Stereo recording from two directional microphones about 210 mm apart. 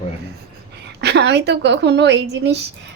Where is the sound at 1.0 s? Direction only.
55° right (ahead or behind).